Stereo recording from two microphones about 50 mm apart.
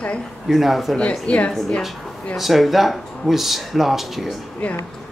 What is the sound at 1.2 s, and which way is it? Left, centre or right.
Speech, left.